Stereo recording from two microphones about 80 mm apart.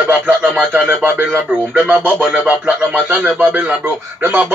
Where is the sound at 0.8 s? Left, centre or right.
Right.